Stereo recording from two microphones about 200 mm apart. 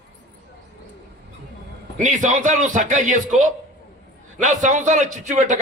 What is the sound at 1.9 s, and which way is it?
A man's voice, 40° right (ahead or behind).